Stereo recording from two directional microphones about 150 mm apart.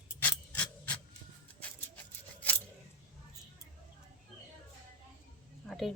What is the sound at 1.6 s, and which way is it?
Scissors, 10° left (ahead or behind).